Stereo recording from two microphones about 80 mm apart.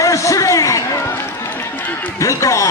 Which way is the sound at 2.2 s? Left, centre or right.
Left.